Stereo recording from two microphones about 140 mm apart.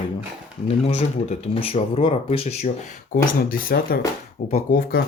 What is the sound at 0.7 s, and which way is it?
Speech, 45° left (ahead or behind).